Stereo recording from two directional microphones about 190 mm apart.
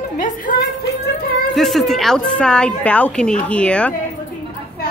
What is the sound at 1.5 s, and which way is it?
A woman's voice, centre (ahead or behind).